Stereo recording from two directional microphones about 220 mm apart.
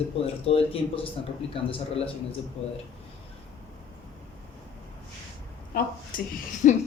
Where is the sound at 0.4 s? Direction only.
25° left (ahead or behind).